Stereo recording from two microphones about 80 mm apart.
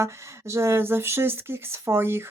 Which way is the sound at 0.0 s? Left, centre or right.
Right.